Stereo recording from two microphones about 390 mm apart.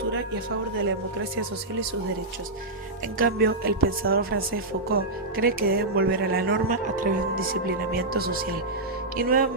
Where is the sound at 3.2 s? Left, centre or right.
Right.